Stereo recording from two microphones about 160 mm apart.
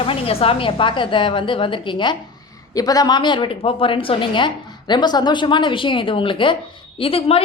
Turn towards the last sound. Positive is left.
turn(degrees=35)  # may be behind; listen again after turning